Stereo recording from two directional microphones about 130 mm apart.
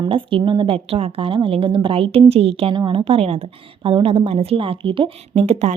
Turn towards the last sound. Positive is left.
turn(degrees=-55)  # may be behind; listen again after turning